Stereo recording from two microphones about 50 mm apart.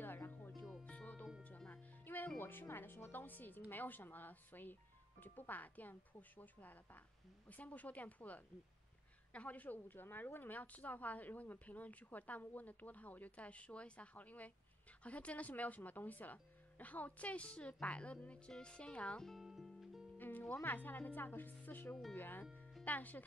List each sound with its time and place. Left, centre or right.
0.0 s music: left
3.7 s a woman's voice: left
19.6 s music: centre
20.2 s music: left
20.6 s a woman's voice: left